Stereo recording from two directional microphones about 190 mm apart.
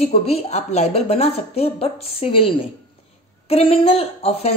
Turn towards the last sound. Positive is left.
turn(degrees=30)  # may be behind; listen again after turning